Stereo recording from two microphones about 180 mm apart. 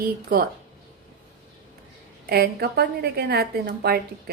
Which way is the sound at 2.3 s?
60° right (ahead or behind).